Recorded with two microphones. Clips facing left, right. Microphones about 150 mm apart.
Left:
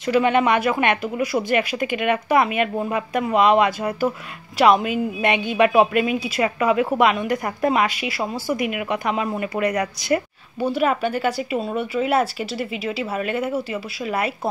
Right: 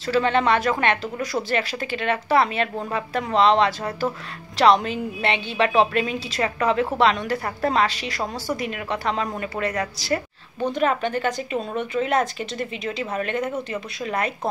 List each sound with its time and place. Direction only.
0.0 s a woman's voice: 15° left (ahead or behind)